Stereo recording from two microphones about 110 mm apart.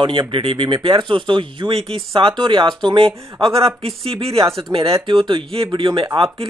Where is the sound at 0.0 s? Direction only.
50° right (ahead or behind).